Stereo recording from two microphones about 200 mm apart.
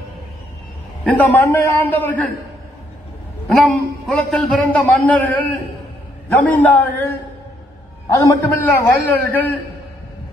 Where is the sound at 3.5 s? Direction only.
Centre (ahead or behind).